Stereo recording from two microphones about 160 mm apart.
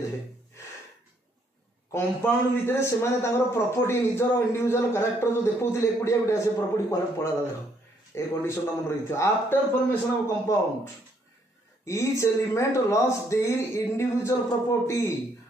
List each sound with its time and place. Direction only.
1.9 s a man's voice: 15° left (ahead or behind)
8.1 s a man's voice: 15° left (ahead or behind)
11.8 s a man's voice: 20° left (ahead or behind)